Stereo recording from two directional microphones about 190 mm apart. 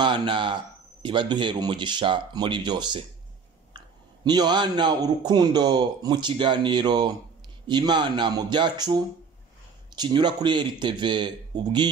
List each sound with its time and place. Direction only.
0.0 s speech: 25° right (ahead or behind)